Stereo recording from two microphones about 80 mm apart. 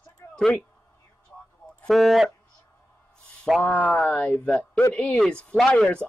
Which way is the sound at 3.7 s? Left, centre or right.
Centre.